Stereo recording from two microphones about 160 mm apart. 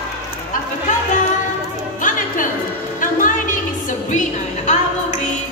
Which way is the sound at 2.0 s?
55° left (ahead or behind).